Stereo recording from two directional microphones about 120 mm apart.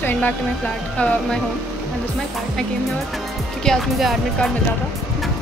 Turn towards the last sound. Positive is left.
turn(degrees=0)  # may be behind; listen again after turning